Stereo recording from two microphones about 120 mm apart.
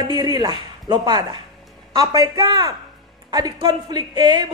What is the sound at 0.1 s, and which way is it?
A woman's voice, 40° right (ahead or behind).